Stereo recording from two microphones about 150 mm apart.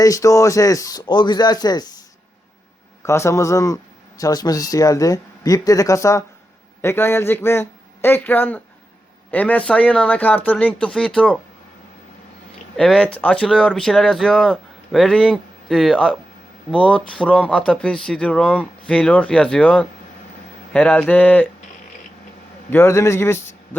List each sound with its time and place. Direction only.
0.0 s speech: 20° left (ahead or behind); by 11.3 s 5° left (ahead or behind)
12.7 s speech: 5° left (ahead or behind)
22.7 s speech: 15° left (ahead or behind)